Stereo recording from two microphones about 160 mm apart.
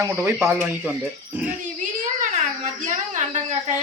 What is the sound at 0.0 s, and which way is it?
Speech, 15° right (ahead or behind).